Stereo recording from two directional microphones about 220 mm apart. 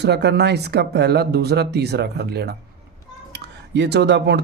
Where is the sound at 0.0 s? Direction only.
50° right (ahead or behind).